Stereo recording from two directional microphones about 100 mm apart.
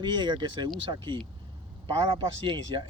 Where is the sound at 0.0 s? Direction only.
50° right (ahead or behind).